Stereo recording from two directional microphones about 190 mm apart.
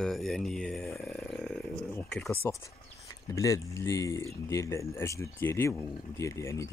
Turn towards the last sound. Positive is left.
turn(degrees=15)  # may be behind; listen again after turning